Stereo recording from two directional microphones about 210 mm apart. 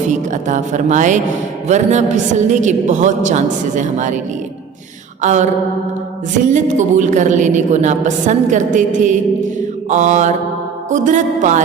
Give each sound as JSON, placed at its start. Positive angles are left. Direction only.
{"t": 0.1, "sound": "a woman's voice", "side_deg": -35}
{"t": 5.2, "sound": "a woman's voice", "side_deg": -35}